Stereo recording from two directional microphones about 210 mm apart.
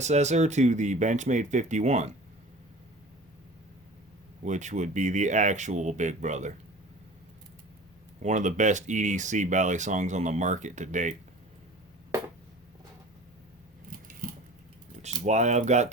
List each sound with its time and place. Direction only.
0.0 s speech: 35° right (ahead or behind)
4.4 s speech: 35° right (ahead or behind)
8.2 s speech: 35° right (ahead or behind)
14.2 s a sound: 40° right (ahead or behind)
15.0 s speech: 35° right (ahead or behind)